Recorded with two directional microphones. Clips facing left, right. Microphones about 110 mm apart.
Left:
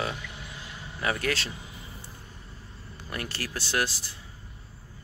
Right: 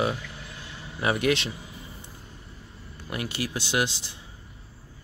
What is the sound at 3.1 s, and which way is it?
Speech, 15° right (ahead or behind).